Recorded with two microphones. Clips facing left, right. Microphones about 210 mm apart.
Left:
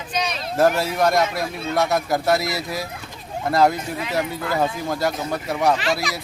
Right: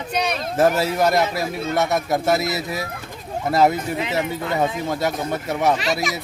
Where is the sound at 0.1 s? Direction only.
60° right (ahead or behind).